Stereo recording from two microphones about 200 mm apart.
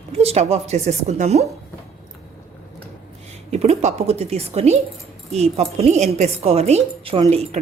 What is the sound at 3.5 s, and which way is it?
A woman's voice, 30° right (ahead or behind).